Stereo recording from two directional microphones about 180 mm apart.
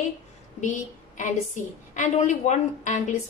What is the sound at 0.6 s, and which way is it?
A woman's voice, 45° left (ahead or behind).